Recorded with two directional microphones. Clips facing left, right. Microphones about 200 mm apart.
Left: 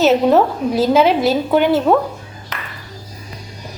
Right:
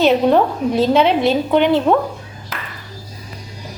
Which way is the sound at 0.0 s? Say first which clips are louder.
Left 1 dB; 5° left (ahead or behind).